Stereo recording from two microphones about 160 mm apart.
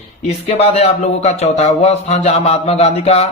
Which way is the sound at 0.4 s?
40° left (ahead or behind).